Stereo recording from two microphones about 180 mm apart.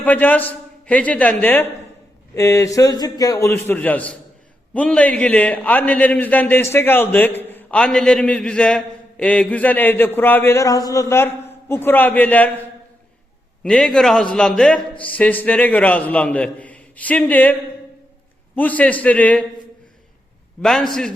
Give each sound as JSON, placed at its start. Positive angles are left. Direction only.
{"t": 0.0, "sound": "a man's voice", "side_deg": 10}
{"t": 13.6, "sound": "a man's voice", "side_deg": 5}
{"t": 20.6, "sound": "a man's voice", "side_deg": 0}